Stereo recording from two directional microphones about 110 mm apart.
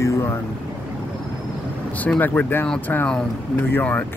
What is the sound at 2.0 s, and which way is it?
Speech, 15° left (ahead or behind).